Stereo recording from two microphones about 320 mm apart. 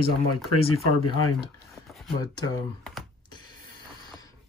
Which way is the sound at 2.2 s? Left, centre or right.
Centre.